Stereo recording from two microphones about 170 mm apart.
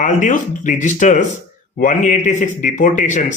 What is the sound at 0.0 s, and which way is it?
A man's voice, 50° left (ahead or behind).